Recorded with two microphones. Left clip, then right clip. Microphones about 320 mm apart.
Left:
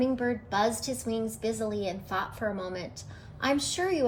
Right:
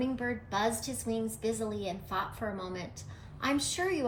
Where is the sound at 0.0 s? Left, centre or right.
Centre.